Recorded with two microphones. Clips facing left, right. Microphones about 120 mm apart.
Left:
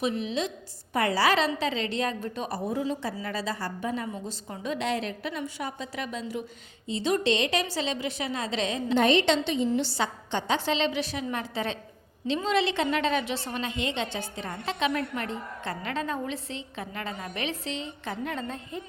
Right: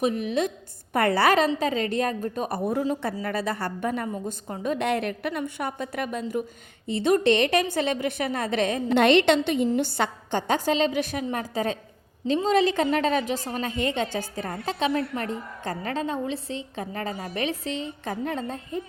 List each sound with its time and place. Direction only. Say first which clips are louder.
0.0 s a woman's voice: right 4 dB; 50° right (ahead or behind)